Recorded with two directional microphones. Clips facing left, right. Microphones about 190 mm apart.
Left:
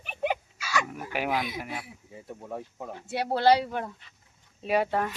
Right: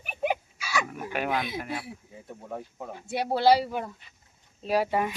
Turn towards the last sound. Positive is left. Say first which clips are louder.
# right 1 dB
turn(degrees=-10)  # may be behind; listen again after turning